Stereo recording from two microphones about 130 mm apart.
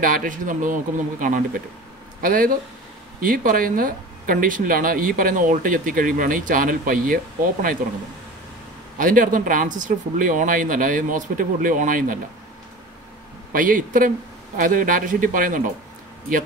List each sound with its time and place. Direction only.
0.0 s speech: 90° right
8.9 s speech: 90° right
13.5 s speech: 90° right